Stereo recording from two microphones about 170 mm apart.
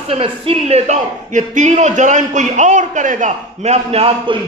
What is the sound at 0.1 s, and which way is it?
A man's voice, 35° right (ahead or behind).